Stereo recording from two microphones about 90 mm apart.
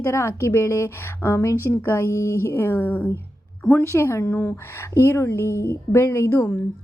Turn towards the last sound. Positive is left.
turn(degrees=25)  # may be behind; listen again after turning